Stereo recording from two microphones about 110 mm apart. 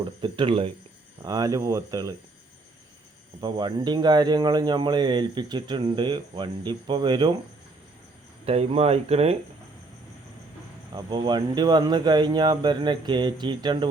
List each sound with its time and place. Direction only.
0.0 s speech: 50° right (ahead or behind)
1.2 s speech: 35° right (ahead or behind)
3.4 s speech: 45° right (ahead or behind)
8.4 s speech: 70° right (ahead or behind)
10.9 s speech: 45° right (ahead or behind)